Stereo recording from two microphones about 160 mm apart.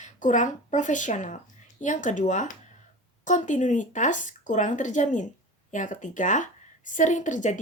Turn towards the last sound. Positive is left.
turn(degrees=50)  # may be behind; listen again after turning